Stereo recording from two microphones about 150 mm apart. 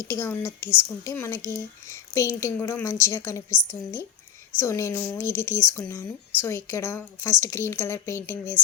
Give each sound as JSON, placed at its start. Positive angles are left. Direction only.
{"t": 0.0, "sound": "speech", "side_deg": 20}